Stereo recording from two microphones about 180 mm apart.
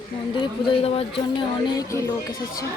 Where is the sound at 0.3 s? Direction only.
25° left (ahead or behind).